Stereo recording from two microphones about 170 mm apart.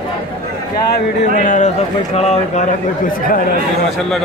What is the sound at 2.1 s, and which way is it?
Speech, 40° left (ahead or behind).